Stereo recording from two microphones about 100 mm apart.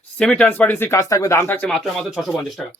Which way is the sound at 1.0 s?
35° left (ahead or behind).